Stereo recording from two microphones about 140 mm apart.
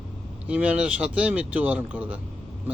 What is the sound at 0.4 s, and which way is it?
Speech, 10° right (ahead or behind).